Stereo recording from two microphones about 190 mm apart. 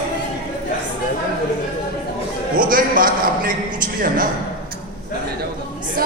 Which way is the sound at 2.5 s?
45° right (ahead or behind).